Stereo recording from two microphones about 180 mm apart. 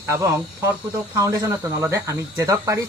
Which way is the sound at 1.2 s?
15° right (ahead or behind).